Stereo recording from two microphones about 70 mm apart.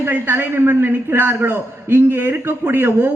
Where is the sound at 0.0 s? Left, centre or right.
Right.